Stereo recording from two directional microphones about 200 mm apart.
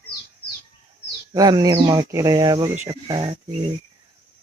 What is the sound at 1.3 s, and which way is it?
Speech, 20° right (ahead or behind).